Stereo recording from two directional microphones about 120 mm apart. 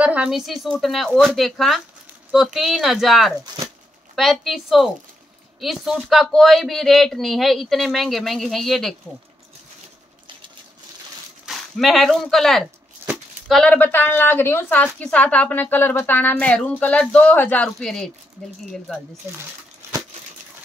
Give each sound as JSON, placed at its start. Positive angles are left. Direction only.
{"t": 0.0, "sound": "a woman's voice", "side_deg": -10}
{"t": 0.3, "sound": "speech", "side_deg": 0}
{"t": 11.4, "sound": "a woman's voice", "side_deg": 0}
{"t": 13.7, "sound": "speech", "side_deg": 15}